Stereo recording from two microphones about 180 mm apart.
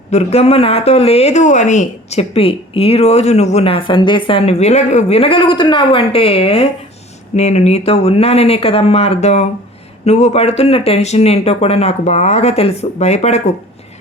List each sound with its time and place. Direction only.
0.1 s speech: 35° left (ahead or behind)